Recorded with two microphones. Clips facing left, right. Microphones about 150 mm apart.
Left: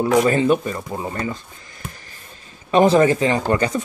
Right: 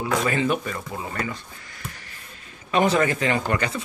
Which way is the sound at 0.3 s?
35° left (ahead or behind).